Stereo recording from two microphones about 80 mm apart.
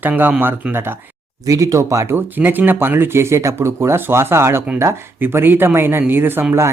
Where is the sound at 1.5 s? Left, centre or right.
Right.